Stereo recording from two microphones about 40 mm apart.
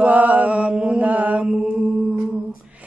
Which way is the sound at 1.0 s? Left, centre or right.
Right.